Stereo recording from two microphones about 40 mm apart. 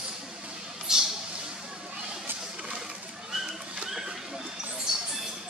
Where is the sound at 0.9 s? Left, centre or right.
Centre.